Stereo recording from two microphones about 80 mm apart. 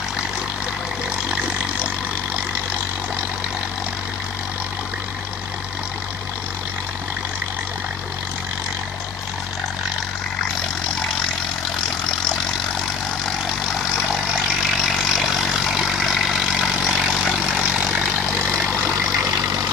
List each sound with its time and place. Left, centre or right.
13.7 s vehicle: centre
18.7 s vehicle: right